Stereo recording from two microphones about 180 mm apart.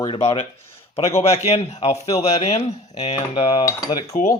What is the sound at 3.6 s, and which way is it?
Speech, 20° left (ahead or behind).